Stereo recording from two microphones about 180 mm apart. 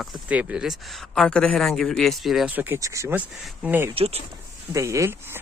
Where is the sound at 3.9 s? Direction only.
30° right (ahead or behind).